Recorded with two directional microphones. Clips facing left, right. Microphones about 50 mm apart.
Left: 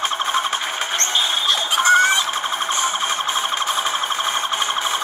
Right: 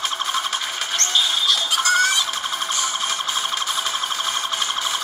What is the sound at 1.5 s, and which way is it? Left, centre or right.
Music, left.